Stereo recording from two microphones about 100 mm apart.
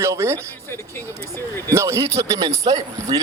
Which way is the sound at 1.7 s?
30° right (ahead or behind).